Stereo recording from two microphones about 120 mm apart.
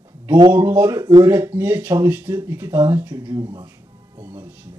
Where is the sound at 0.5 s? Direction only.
15° right (ahead or behind).